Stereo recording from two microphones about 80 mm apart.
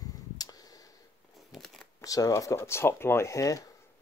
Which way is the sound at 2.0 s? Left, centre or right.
Left.